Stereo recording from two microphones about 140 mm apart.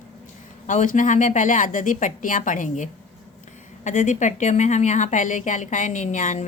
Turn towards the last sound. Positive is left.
turn(degrees=65)  # may be behind; listen again after turning